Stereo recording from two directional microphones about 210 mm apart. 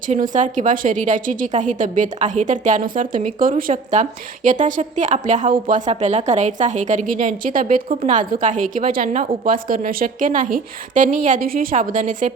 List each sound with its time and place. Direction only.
0.1 s a woman's voice: 35° right (ahead or behind)